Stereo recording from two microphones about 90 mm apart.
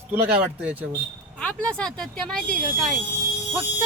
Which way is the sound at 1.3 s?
10° left (ahead or behind).